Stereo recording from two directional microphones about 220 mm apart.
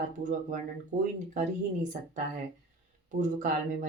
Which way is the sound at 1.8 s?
35° right (ahead or behind).